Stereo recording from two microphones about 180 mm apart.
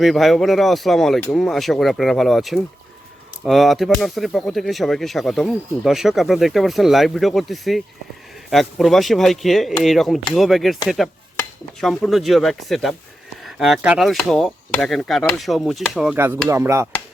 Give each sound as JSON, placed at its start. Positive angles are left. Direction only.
{"t": 0.0, "sound": "speech", "side_deg": 0}
{"t": 16.5, "sound": "hammer", "side_deg": -15}